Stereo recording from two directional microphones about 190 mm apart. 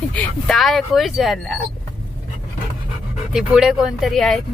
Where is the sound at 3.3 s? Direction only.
5° right (ahead or behind).